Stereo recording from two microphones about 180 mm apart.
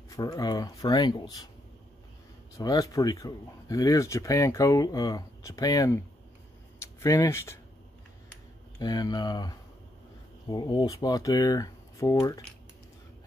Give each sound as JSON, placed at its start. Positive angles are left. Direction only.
{"t": 0.1, "sound": "speech", "side_deg": 20}
{"t": 2.5, "sound": "speech", "side_deg": 20}
{"t": 8.7, "sound": "speech", "side_deg": 20}